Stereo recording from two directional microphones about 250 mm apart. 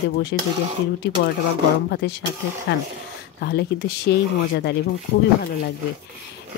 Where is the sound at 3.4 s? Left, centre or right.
Left.